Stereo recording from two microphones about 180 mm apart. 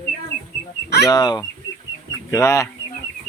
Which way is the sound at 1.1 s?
20° left (ahead or behind).